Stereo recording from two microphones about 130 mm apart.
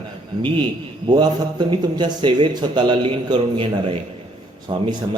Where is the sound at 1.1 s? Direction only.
35° right (ahead or behind).